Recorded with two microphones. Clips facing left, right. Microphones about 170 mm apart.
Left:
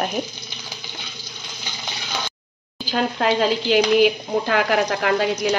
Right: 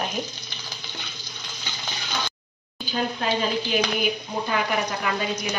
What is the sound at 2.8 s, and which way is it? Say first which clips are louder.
Speech: left 5 dB; 85° left.